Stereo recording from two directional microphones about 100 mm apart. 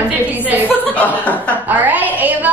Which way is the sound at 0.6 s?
15° left (ahead or behind).